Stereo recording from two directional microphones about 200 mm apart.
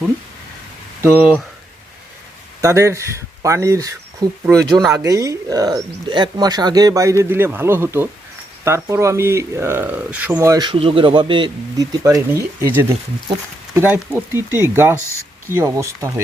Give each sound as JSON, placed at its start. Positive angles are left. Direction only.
{"t": 1.0, "sound": "speech", "side_deg": -10}
{"t": 2.6, "sound": "speech", "side_deg": -15}